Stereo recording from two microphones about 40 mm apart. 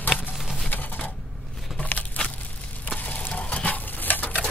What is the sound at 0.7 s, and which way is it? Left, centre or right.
Typewriter, left.